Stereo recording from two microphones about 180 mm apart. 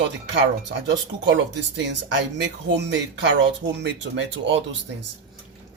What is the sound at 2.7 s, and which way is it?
Speech, 80° right.